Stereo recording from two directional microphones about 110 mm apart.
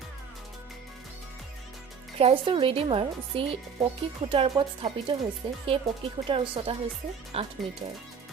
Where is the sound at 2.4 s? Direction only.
55° right (ahead or behind).